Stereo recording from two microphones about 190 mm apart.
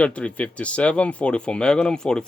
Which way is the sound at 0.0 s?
5° left (ahead or behind).